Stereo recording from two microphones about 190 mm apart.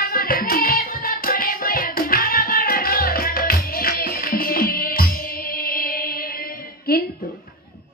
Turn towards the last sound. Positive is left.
turn(degrees=50)  # may be behind; listen again after turning